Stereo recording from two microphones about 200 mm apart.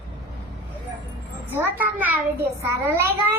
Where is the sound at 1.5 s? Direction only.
10° right (ahead or behind).